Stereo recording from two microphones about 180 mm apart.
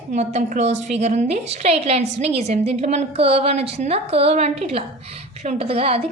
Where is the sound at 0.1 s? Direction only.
40° right (ahead or behind).